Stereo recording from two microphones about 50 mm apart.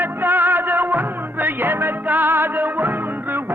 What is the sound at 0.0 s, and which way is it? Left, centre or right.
Music, right.